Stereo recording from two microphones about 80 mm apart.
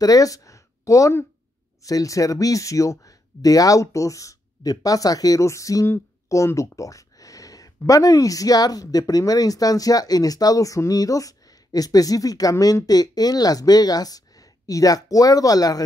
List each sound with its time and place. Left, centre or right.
0.0 s speech: left